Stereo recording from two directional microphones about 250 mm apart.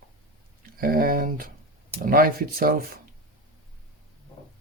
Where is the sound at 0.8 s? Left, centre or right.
Right.